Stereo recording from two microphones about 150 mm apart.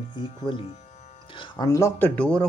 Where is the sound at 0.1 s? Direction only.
30° left (ahead or behind).